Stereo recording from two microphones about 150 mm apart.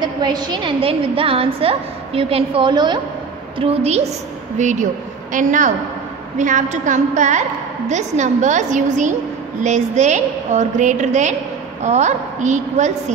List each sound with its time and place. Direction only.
0.0 s a woman's voice: 30° right (ahead or behind)
3.5 s a woman's voice: 45° right (ahead or behind)